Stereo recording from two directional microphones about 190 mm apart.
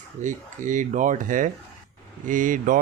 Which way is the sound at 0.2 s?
40° right (ahead or behind).